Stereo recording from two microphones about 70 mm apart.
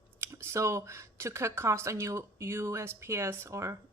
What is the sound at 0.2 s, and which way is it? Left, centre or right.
Speech, right.